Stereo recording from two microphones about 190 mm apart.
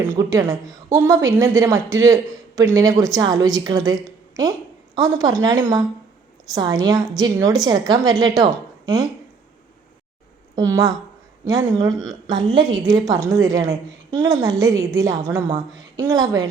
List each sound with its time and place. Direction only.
0.1 s a woman's voice: 15° right (ahead or behind)
10.5 s a woman's voice: 20° right (ahead or behind)